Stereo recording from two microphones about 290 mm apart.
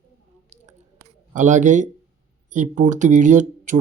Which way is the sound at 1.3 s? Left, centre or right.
Right.